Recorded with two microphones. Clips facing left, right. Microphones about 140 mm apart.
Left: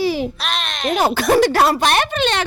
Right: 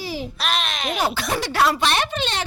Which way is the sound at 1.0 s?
50° left (ahead or behind).